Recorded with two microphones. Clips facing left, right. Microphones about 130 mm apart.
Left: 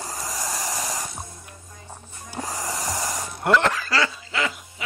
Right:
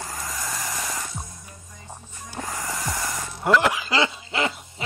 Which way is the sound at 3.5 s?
10° right (ahead or behind).